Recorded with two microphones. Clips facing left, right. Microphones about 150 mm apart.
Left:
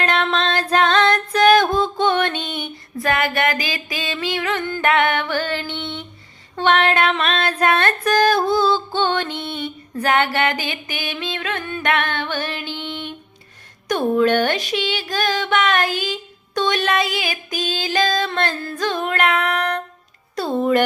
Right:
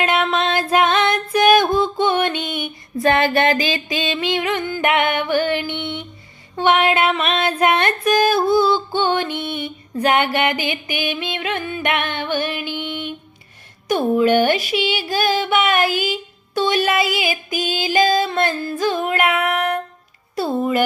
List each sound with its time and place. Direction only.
0.0 s music: 10° right (ahead or behind)
3.0 s music: 25° right (ahead or behind)
6.6 s a sound: 10° right (ahead or behind)
13.8 s music: 10° right (ahead or behind)
20.3 s speech: 5° right (ahead or behind)